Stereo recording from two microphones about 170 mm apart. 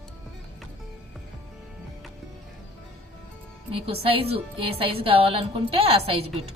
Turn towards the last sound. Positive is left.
turn(degrees=-35)  # may be behind; listen again after turning